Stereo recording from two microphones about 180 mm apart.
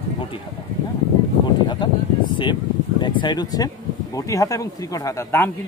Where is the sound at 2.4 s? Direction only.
25° left (ahead or behind).